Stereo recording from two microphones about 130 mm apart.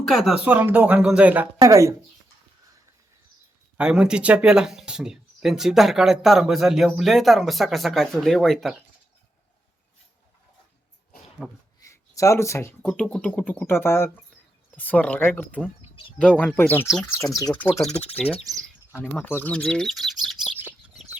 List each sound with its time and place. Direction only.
0.1 s speech: centre (ahead or behind)
0.4 s speech: 15° right (ahead or behind)
1.6 s speech: 25° right (ahead or behind)
3.8 s speech: 5° right (ahead or behind)
11.4 s speech: centre (ahead or behind)
11.8 s a sound: 25° left (ahead or behind)
12.8 s speech: 10° left (ahead or behind)
19.1 s speech: 15° left (ahead or behind)